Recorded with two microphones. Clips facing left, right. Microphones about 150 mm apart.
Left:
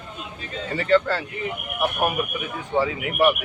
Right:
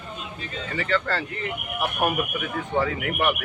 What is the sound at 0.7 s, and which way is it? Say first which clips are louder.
Speech: left 7 dB; 35° left (ahead or behind).